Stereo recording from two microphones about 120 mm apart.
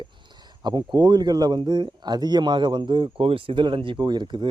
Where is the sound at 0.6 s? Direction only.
35° right (ahead or behind).